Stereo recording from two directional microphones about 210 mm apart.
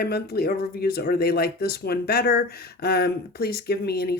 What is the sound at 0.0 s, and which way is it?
Speech, 50° left (ahead or behind).